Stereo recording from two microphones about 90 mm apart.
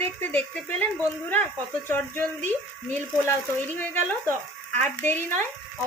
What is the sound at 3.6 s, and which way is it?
Speech, 20° left (ahead or behind).